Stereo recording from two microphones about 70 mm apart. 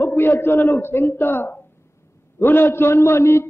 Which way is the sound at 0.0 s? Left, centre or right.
Left.